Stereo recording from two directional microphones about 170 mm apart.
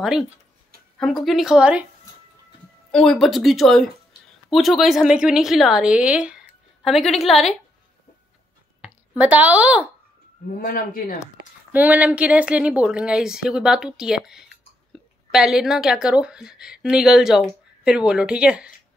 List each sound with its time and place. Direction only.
0.0 s a woman's voice: 5° right (ahead or behind)
2.9 s a woman's voice: 5° left (ahead or behind)
8.8 s speech: 10° right (ahead or behind)
10.6 s speech: 55° left (ahead or behind)
11.7 s a woman's voice: 10° right (ahead or behind)